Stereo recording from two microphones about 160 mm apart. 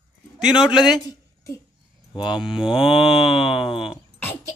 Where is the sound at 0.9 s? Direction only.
20° left (ahead or behind).